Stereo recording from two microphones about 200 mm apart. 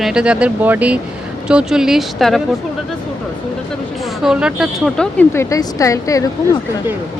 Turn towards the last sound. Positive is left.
turn(degrees=15)  # may be behind; listen again after turning